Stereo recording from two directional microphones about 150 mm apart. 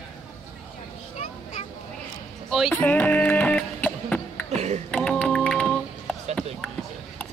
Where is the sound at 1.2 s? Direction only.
45° left (ahead or behind).